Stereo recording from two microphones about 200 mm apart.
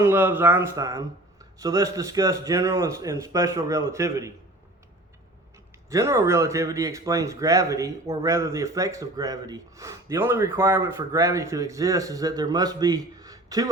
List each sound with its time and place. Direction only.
0.0 s speech: 10° right (ahead or behind)
5.9 s speech: 15° right (ahead or behind)